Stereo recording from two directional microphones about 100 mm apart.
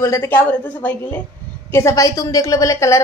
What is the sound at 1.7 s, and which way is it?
Speech, 25° left (ahead or behind).